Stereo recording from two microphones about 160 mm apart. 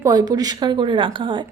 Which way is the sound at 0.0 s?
25° right (ahead or behind).